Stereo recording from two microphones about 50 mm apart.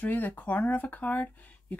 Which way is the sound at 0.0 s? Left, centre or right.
Left.